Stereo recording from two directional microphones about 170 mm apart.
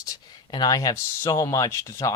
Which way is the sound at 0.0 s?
25° left (ahead or behind).